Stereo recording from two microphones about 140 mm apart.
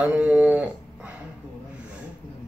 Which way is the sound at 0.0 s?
10° right (ahead or behind).